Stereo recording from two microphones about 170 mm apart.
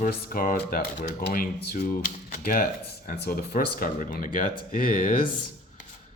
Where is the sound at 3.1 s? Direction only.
65° left (ahead or behind).